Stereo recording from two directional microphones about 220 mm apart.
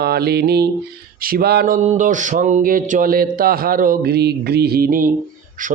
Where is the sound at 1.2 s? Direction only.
45° right (ahead or behind).